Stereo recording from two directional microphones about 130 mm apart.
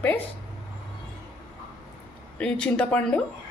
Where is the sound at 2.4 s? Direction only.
10° left (ahead or behind).